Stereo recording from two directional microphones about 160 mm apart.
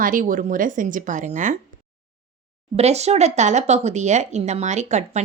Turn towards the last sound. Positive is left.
turn(degrees=-45)  # may be behind; listen again after turning